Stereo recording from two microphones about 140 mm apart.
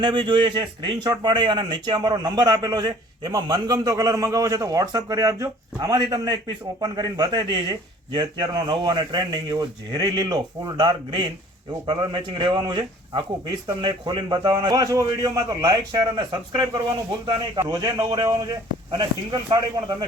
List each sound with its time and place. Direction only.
0.0 s a man's voice: 35° right (ahead or behind)